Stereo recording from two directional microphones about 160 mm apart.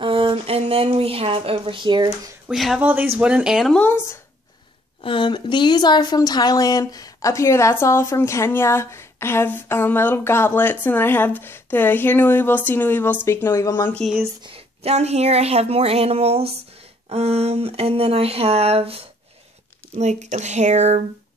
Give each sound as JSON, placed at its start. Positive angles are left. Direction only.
{"t": 0.0, "sound": "speech", "side_deg": -35}
{"t": 2.4, "sound": "speech", "side_deg": 0}
{"t": 3.8, "sound": "a woman's voice", "side_deg": 15}
{"t": 5.0, "sound": "a woman's voice", "side_deg": 30}
{"t": 14.4, "sound": "speech", "side_deg": -35}